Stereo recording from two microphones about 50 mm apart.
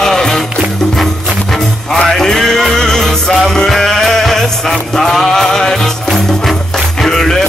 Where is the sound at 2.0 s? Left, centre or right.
Centre.